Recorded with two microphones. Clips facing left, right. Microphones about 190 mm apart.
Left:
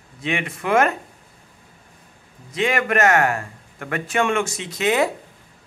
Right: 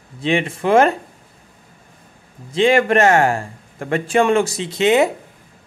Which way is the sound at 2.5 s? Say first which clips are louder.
Right 7 dB; 30° right (ahead or behind).